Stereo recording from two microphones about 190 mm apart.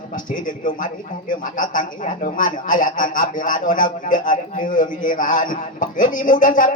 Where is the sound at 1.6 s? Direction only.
45° left (ahead or behind).